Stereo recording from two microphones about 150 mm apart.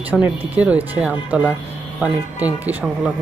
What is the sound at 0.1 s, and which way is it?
Speech, 10° right (ahead or behind).